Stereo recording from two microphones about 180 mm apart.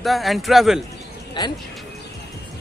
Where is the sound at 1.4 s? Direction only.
25° left (ahead or behind).